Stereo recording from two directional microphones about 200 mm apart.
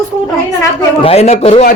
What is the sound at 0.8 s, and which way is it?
Speech, 30° left (ahead or behind).